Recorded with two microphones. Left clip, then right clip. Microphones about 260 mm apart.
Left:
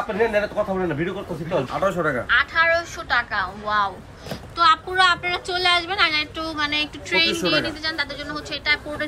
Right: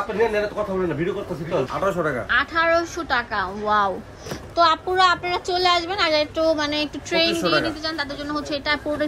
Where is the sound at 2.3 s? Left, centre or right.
Right.